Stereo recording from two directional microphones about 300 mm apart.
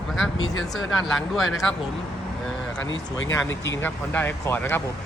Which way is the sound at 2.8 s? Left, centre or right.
Left.